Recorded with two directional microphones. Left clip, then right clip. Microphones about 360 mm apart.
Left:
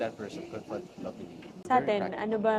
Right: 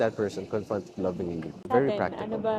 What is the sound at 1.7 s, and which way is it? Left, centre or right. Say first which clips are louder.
Speech: right 1 dB; left.